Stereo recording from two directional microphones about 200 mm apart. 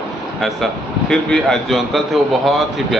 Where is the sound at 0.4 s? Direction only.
Centre (ahead or behind).